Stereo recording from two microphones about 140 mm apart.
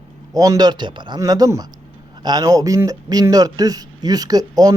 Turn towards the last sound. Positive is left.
turn(degrees=-25)  # may be behind; listen again after turning